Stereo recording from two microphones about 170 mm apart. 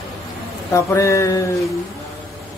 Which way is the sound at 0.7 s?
15° left (ahead or behind).